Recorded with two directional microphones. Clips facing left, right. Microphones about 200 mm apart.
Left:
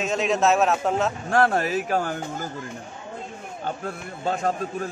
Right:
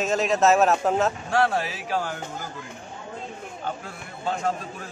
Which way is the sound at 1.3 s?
50° left (ahead or behind).